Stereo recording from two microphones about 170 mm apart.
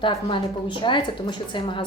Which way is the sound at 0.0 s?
30° left (ahead or behind).